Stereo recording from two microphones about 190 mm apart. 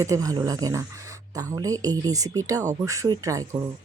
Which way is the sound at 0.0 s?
20° right (ahead or behind).